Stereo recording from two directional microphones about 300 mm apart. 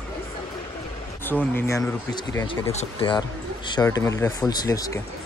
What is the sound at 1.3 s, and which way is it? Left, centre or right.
Speech, centre.